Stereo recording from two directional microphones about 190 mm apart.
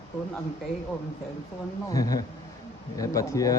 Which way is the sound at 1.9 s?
20° left (ahead or behind).